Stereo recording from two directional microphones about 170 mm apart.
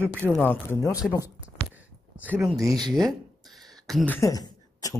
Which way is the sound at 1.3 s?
10° right (ahead or behind).